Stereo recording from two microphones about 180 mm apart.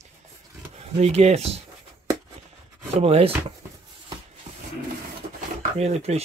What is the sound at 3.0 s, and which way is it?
Speech, 35° right (ahead or behind).